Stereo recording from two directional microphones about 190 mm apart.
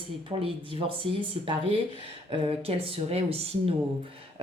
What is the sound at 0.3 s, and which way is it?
A woman's voice, 30° right (ahead or behind).